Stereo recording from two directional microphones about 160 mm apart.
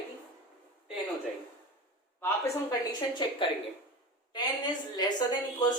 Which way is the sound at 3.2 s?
30° left (ahead or behind).